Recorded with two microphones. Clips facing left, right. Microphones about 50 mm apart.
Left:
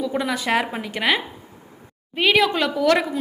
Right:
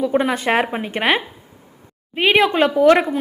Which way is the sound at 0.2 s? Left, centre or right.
Right.